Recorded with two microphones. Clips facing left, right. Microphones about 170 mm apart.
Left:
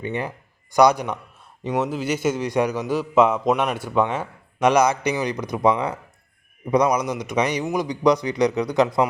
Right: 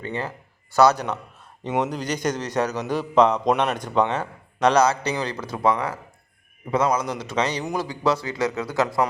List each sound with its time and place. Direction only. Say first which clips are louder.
0.0 s a man's voice: left 2 dB; 15° left (ahead or behind)